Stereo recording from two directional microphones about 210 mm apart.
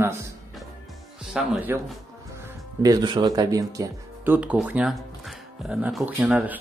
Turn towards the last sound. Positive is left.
turn(degrees=-5)  # may be behind; listen again after turning